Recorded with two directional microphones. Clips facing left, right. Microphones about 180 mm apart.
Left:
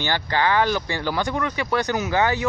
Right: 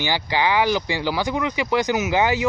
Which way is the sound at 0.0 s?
10° right (ahead or behind).